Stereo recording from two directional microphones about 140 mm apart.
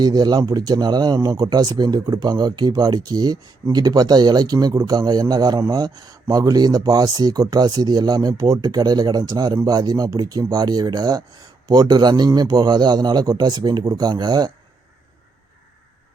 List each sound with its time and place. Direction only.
0.0 s speech: 30° right (ahead or behind)